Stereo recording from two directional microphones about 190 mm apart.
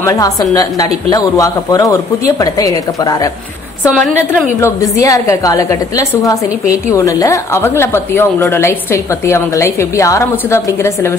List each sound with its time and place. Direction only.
0.0 s a woman's voice: 15° left (ahead or behind)
4.3 s a woman's voice: 10° left (ahead or behind)